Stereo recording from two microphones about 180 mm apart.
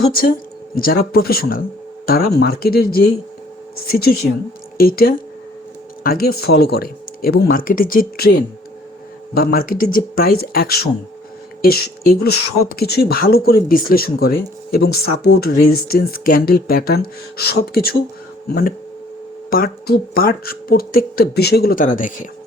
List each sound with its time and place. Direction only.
0.0 s speech: 55° left (ahead or behind)
9.3 s speech: 55° left (ahead or behind)